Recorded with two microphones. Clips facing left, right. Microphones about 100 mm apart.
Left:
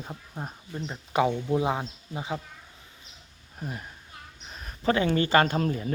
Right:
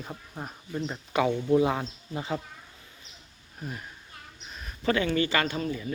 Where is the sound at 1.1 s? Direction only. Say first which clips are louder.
Right 1 dB; 25° left (ahead or behind).